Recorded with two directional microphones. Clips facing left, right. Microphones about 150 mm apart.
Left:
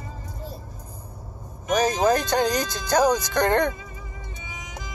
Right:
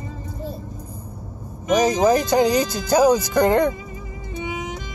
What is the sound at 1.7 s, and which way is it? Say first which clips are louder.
Speech: right 4 dB; 15° right (ahead or behind).